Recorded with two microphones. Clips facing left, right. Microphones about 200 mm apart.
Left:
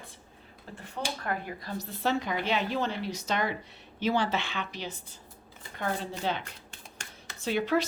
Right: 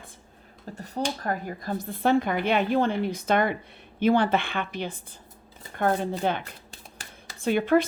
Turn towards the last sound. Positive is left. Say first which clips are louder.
# right 6 dB
turn(degrees=-50)  # may be behind; listen again after turning